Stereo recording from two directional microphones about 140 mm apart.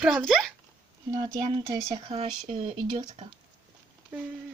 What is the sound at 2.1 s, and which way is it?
Speech, 50° right (ahead or behind).